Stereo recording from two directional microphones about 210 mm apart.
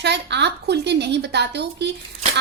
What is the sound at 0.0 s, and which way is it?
Speech, 55° right (ahead or behind).